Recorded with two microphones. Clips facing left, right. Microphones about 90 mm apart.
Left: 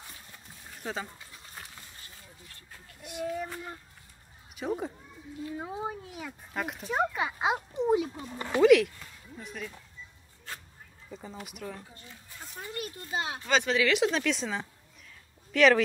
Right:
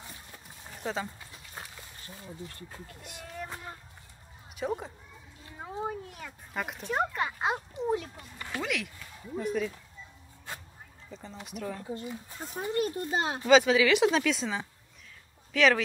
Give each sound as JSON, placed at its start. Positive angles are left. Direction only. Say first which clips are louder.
{"t": 0.7, "sound": "a sound", "louder": "right 2 dB", "side_deg": 0}
{"t": 3.0, "sound": "speech", "louder": "left 9 dB", "side_deg": 10}
{"t": 4.6, "sound": "speech", "louder": "left 1 dB", "side_deg": 0}
{"t": 8.3, "sound": "speech", "louder": "left 10 dB", "side_deg": 20}
{"t": 8.6, "sound": "speech", "louder": "left 15 dB", "side_deg": 0}
{"t": 11.1, "sound": "speech", "louder": "left 2 dB", "side_deg": 5}
{"t": 12.1, "sound": "a child's voice", "louder": "right 8 dB", "side_deg": -25}
{"t": 13.5, "sound": "speech", "louder": "right 5 dB", "side_deg": 0}